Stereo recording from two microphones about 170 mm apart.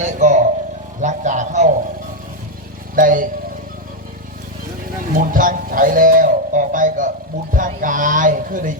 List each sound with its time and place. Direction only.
0.0 s a sound: 50° right (ahead or behind)
1.0 s speech: 45° right (ahead or behind)
2.9 s speech: 55° right (ahead or behind)
5.1 s speech: 55° right (ahead or behind)